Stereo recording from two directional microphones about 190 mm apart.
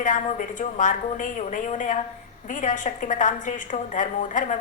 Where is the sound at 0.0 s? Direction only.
45° left (ahead or behind).